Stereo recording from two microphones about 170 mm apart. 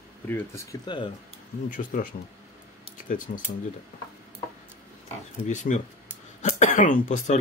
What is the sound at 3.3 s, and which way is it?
Speech, 55° left (ahead or behind).